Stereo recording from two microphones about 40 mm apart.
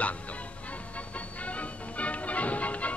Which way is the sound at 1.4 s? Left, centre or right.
Left.